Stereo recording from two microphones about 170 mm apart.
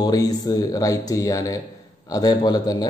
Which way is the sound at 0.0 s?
20° left (ahead or behind).